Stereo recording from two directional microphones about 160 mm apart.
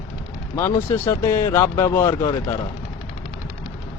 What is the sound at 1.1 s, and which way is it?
Speech, 20° left (ahead or behind).